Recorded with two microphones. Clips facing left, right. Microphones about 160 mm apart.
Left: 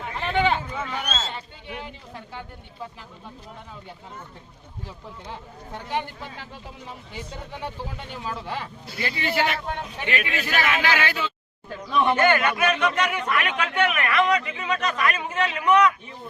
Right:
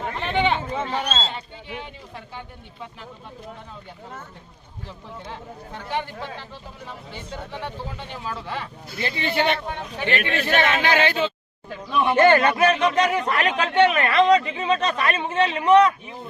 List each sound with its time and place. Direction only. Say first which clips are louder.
0.2 s speech: even; centre (ahead or behind)
0.7 s speech: right 4 dB; 30° right (ahead or behind)
9.0 s a man's voice: right 1 dB; 25° right (ahead or behind)
11.9 s speech: even; 5° right (ahead or behind)
12.1 s speech: right 5 dB; 30° right (ahead or behind)